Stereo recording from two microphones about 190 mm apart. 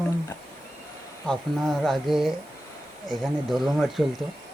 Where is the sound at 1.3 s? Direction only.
Centre (ahead or behind).